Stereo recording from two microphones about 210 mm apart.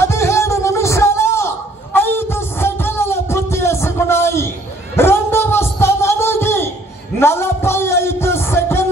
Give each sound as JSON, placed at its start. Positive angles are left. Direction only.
{"t": 0.0, "sound": "music", "side_deg": 15}
{"t": 2.0, "sound": "a sound", "side_deg": 10}
{"t": 7.2, "sound": "music", "side_deg": 10}